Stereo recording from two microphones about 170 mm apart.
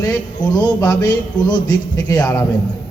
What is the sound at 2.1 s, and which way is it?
Speech, 10° left (ahead or behind).